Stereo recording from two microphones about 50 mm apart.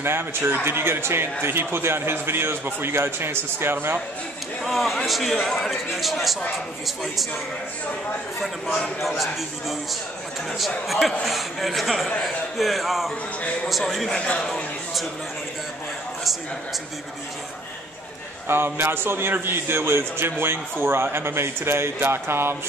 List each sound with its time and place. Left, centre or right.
0.0 s a man's voice: right
4.6 s a man's voice: centre
9.0 s a man's voice: centre
10.9 s a man's voice: centre
14.1 s a man's voice: centre
18.5 s a man's voice: right